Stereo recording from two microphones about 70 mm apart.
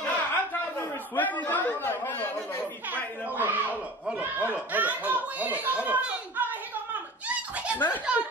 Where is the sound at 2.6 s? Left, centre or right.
Right.